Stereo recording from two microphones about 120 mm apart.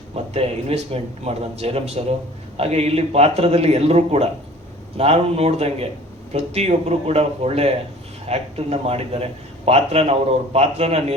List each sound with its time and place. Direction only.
0.1 s a man's voice: 55° right (ahead or behind)